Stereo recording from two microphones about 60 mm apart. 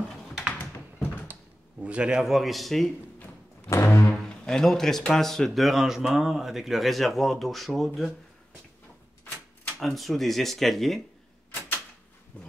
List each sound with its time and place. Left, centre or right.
0.3 s typing: centre
1.2 s a sound: right
1.9 s speech: centre
2.2 s speech: centre
3.7 s music: left
4.5 s speech: centre
9.8 s speech: centre
12.3 s vehicle: left